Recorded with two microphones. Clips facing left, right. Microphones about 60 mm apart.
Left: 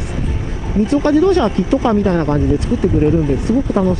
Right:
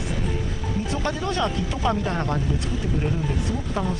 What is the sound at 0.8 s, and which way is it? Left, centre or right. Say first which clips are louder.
Speech: left 16 dB; left.